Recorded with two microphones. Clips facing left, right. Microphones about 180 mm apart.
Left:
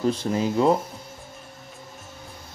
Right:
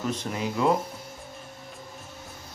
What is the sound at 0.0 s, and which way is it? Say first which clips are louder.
Speech: left 6 dB; 30° left (ahead or behind).